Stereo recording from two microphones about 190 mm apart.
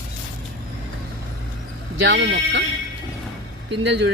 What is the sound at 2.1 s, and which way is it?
Speech, 70° right (ahead or behind).